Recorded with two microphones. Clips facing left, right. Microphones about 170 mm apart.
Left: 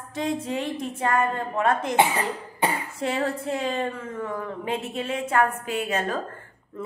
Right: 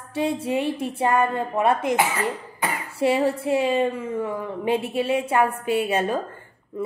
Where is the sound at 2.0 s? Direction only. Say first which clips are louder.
Left 1 dB; 30° left (ahead or behind).